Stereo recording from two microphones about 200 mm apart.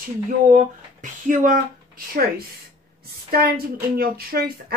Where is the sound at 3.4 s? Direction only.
45° right (ahead or behind).